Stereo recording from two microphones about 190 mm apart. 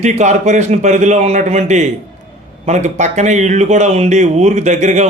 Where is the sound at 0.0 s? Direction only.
40° right (ahead or behind).